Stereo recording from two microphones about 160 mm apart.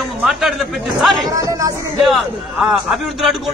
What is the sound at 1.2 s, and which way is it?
Speech, 20° right (ahead or behind).